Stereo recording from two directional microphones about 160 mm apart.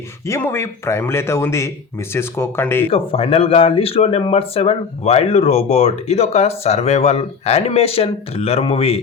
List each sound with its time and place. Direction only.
0.3 s a man's voice: 15° left (ahead or behind)
2.9 s speech: 35° left (ahead or behind)